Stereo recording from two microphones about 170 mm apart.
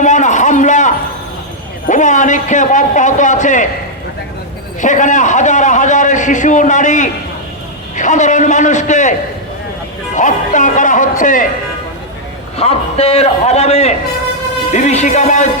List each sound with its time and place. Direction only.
0.0 s a sound: 45° left (ahead or behind)
1.9 s a man's voice: 45° left (ahead or behind)
4.8 s a man's voice: 45° left (ahead or behind)
10.2 s a man's voice: 45° left (ahead or behind)
12.5 s a man's voice: 35° left (ahead or behind)